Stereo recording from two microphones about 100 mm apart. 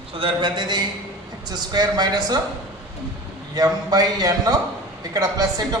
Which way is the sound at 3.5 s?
40° right (ahead or behind).